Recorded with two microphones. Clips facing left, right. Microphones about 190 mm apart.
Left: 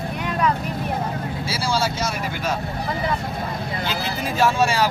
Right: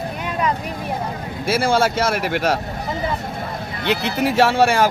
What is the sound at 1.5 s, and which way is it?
Speech, 55° right (ahead or behind).